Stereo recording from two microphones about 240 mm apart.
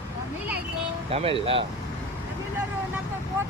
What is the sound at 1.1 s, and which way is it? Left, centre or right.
Speech, right.